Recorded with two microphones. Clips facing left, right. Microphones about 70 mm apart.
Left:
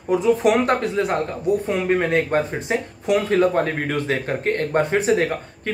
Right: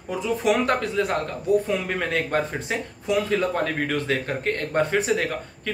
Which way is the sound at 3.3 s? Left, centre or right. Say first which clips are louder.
Left 5 dB; left.